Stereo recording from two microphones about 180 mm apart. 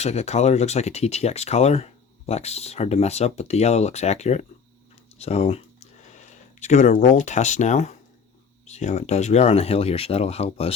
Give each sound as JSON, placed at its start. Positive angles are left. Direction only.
{"t": 0.0, "sound": "speech", "side_deg": 35}